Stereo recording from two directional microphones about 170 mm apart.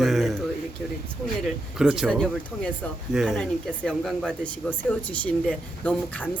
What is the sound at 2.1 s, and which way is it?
Speech, 5° left (ahead or behind).